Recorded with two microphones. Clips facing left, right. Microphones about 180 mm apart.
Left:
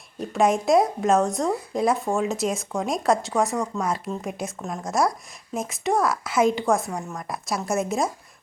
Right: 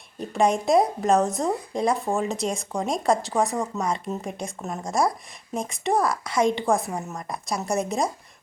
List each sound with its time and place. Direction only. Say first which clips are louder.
0.2 s speech: left 1 dB; centre (ahead or behind)